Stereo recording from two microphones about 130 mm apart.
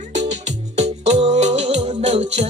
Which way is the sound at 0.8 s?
55° right (ahead or behind).